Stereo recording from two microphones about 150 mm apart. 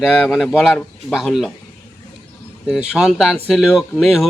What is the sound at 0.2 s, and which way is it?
Speech, centre (ahead or behind).